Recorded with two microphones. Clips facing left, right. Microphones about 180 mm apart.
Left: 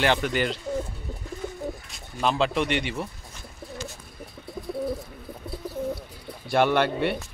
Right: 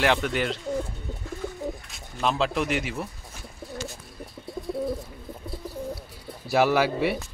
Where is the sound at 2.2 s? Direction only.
Centre (ahead or behind).